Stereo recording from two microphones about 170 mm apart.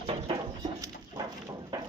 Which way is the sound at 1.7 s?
25° right (ahead or behind).